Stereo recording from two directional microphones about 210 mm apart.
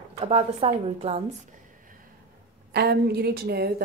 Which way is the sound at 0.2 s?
30° right (ahead or behind).